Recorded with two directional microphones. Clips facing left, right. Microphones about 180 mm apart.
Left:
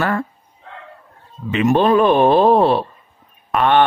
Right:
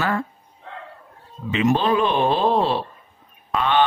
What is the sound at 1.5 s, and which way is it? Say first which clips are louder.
A man's voice: left 5 dB; 55° left (ahead or behind).